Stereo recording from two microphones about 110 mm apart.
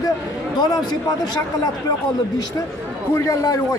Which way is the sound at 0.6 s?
40° left (ahead or behind).